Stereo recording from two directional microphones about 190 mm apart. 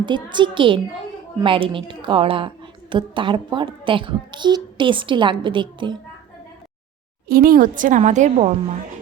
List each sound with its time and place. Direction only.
0.0 s a child's voice: 25° right (ahead or behind)
7.3 s a woman's voice: 50° right (ahead or behind)